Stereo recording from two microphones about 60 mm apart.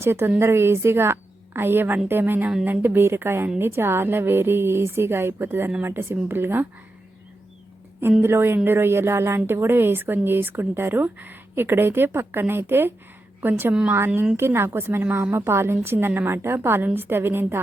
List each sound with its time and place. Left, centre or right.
0.0 s a woman's voice: right
8.2 s a woman's voice: right